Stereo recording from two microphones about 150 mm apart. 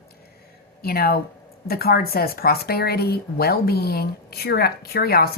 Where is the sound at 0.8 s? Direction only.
90° left.